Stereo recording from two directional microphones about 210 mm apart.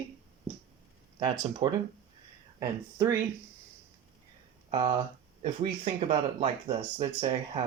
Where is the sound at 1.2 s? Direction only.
20° right (ahead or behind).